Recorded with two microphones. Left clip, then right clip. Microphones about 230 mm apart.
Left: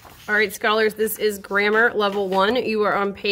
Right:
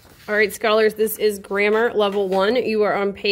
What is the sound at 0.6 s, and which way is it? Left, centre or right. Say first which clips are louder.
A woman's voice: right 2 dB; centre.